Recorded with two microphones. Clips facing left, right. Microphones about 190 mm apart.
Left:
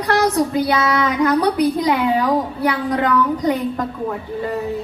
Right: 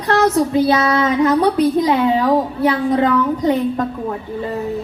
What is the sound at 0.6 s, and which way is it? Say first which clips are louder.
A woman's voice: right 3 dB; 25° right (ahead or behind).